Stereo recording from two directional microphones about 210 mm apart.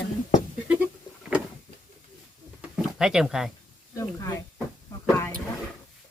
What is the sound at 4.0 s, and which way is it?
Speech, 15° left (ahead or behind).